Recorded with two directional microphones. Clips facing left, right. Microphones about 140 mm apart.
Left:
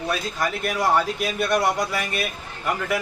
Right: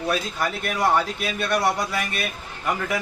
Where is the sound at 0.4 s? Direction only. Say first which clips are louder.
Left 1 dB; 5° left (ahead or behind).